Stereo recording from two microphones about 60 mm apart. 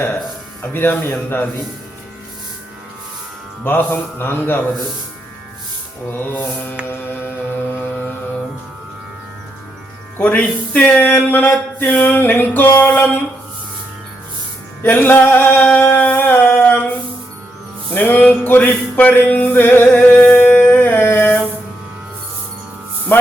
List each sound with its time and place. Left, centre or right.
0.6 s music: left
3.6 s music: left
6.1 s music: left
10.2 s speech: left
11.1 s music: left
14.8 s a sound: left
17.9 s music: left
20.7 s a sound: left